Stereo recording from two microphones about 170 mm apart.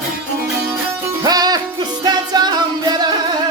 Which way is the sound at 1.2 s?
25° right (ahead or behind).